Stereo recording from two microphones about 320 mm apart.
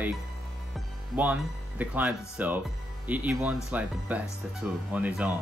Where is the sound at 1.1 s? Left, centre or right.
Centre.